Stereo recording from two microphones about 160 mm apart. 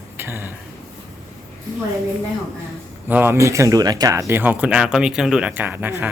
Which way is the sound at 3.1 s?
10° right (ahead or behind).